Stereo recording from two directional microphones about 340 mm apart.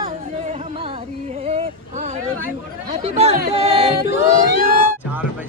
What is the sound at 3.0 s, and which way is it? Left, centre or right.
Speech, centre.